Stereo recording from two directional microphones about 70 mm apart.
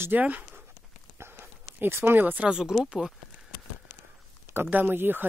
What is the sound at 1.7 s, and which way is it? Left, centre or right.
Speech, right.